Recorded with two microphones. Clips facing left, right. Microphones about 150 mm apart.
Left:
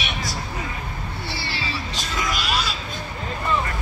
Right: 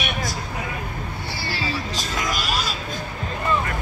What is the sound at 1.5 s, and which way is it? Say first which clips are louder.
Music: right 3 dB; 45° right (ahead or behind).